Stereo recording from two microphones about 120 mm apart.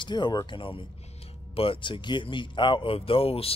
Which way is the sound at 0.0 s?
40° left (ahead or behind).